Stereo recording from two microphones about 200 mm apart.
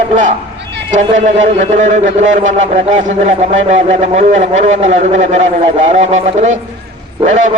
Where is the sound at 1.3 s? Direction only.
35° right (ahead or behind).